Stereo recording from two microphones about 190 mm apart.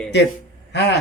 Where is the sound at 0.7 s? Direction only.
60° left (ahead or behind).